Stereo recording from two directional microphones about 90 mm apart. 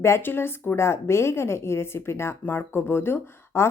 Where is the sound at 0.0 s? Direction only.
25° left (ahead or behind).